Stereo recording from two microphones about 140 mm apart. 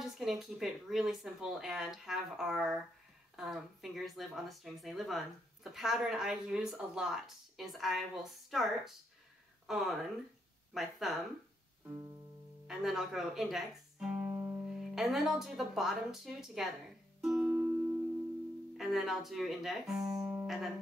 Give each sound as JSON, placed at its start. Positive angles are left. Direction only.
{"t": 0.0, "sound": "speech", "side_deg": 0}
{"t": 11.8, "sound": "music", "side_deg": -20}
{"t": 12.6, "sound": "speech", "side_deg": -5}
{"t": 14.2, "sound": "music", "side_deg": -20}
{"t": 15.0, "sound": "speech", "side_deg": 0}
{"t": 17.2, "sound": "music", "side_deg": -5}
{"t": 17.5, "sound": "music", "side_deg": -15}
{"t": 18.8, "sound": "speech", "side_deg": 0}
{"t": 20.0, "sound": "speech", "side_deg": -30}
{"t": 20.2, "sound": "music", "side_deg": -5}